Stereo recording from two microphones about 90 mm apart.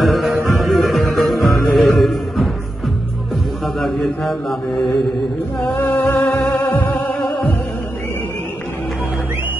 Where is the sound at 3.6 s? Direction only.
Centre (ahead or behind).